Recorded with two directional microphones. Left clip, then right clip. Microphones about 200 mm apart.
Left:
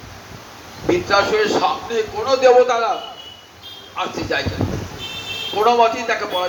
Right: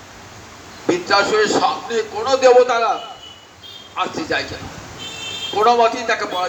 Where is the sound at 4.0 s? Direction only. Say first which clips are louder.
Right 1 dB; 20° right (ahead or behind).